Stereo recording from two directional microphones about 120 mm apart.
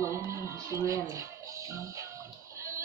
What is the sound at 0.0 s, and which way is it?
Music, 25° right (ahead or behind).